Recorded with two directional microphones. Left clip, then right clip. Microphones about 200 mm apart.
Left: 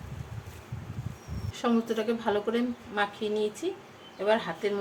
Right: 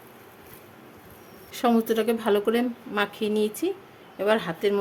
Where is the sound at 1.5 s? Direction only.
45° right (ahead or behind).